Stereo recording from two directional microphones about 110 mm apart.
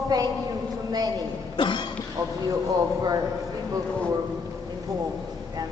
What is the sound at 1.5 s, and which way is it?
Speech, 50° left (ahead or behind).